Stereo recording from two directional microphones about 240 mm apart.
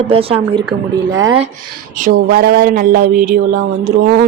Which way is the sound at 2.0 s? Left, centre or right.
Right.